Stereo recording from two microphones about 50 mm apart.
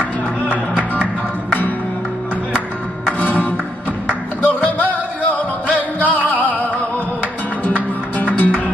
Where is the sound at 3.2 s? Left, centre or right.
Left.